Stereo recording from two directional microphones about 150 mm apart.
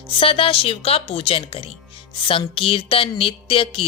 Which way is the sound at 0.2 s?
40° left (ahead or behind).